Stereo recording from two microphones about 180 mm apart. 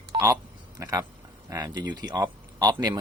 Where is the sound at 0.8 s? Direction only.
20° right (ahead or behind).